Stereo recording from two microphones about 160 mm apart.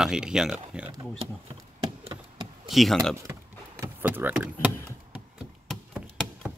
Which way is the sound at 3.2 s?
20° right (ahead or behind).